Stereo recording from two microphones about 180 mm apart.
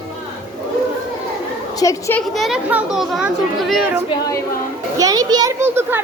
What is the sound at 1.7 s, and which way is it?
Speech, 15° left (ahead or behind).